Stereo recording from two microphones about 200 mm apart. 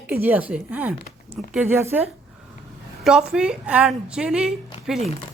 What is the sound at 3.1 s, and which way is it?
A woman's voice, 5° right (ahead or behind).